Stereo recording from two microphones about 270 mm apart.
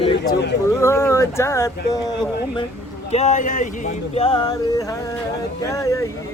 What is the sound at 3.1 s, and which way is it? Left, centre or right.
Speech, left.